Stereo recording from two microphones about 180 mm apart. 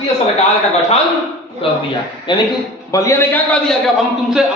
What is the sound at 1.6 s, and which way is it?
Speech, 30° left (ahead or behind).